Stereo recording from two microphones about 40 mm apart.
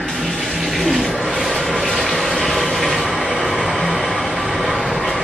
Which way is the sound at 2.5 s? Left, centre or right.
Centre.